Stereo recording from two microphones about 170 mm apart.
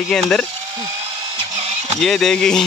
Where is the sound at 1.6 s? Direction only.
40° right (ahead or behind).